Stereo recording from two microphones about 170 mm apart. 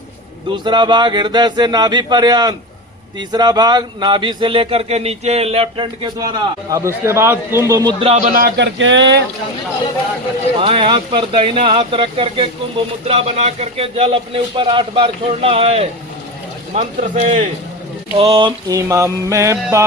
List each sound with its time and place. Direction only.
0.5 s speech: 25° right (ahead or behind)
6.1 s a man's voice: 20° right (ahead or behind)
8.0 s speech: 40° right (ahead or behind)
8.5 s speech: 90° right
10.6 s a man's voice: 30° right (ahead or behind); by 17.5 s 50° right (ahead or behind)
18.2 s speech: 30° right (ahead or behind)
18.7 s a man's voice: 20° right (ahead or behind)